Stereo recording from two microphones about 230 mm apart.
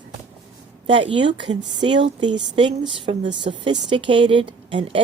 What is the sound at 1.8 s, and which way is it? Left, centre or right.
A woman's voice, right.